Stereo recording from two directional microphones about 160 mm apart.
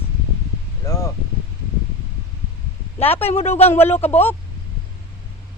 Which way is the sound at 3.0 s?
10° left (ahead or behind).